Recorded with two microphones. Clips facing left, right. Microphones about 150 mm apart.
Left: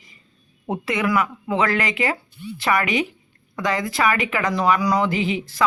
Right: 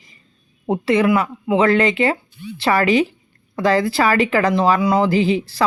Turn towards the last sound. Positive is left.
turn(degrees=-35)  # may be behind; listen again after turning